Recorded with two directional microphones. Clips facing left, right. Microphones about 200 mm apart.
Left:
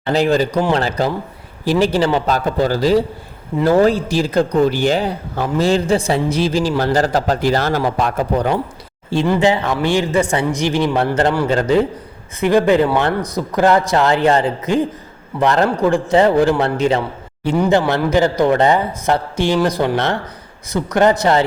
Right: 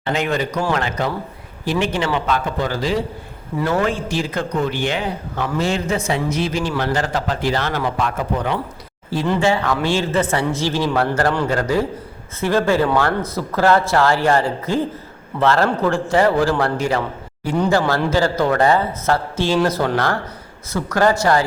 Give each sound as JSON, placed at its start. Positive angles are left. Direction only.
{"t": 0.1, "sound": "a man's voice", "side_deg": 35}
{"t": 9.2, "sound": "a woman's voice", "side_deg": 15}